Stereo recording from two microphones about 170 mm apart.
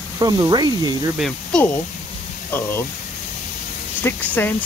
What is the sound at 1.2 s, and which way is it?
Speech, 5° left (ahead or behind).